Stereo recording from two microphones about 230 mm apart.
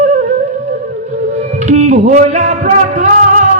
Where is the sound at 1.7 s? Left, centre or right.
Right.